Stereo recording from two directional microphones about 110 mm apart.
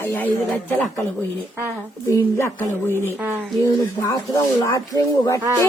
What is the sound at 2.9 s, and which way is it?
Speech, 20° right (ahead or behind).